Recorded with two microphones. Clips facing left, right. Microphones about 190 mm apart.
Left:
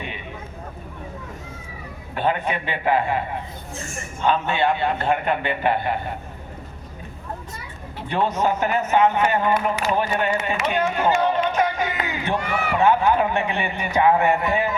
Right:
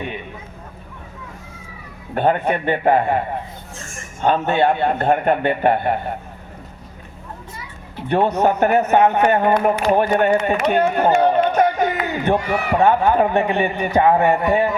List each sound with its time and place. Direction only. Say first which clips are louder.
2.1 s a man's voice: right 5 dB; 50° right (ahead or behind)
8.0 s a man's voice: right 5 dB; 55° right (ahead or behind); by 14.8 s 35° right (ahead or behind)